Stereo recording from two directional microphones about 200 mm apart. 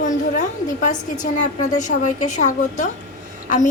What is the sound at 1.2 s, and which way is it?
A woman's voice, 40° left (ahead or behind).